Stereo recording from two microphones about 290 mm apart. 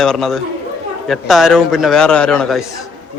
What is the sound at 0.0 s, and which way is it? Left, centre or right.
A man's voice, centre.